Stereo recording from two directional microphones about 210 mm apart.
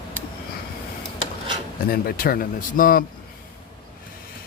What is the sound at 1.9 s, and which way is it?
Speech, 45° left (ahead or behind).